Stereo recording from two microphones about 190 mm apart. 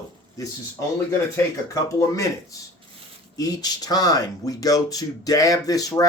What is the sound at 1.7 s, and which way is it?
Speech, 15° left (ahead or behind).